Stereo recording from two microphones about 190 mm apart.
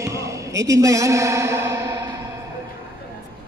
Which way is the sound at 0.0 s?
15° right (ahead or behind).